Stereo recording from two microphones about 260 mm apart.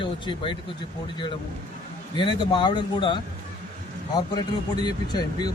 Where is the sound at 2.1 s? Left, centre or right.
Centre.